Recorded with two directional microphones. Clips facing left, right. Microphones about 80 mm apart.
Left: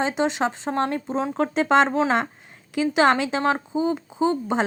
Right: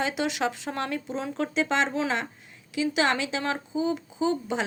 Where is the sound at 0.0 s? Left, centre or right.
Left.